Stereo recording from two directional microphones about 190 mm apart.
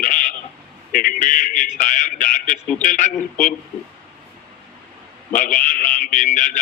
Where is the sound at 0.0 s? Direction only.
40° left (ahead or behind).